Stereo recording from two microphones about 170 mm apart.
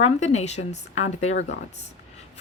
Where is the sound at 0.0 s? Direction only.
40° left (ahead or behind).